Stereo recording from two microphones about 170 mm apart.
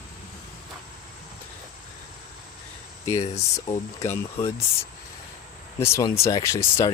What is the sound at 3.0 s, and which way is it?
Speech, 40° left (ahead or behind).